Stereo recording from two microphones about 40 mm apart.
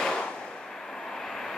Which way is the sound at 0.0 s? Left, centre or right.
Centre.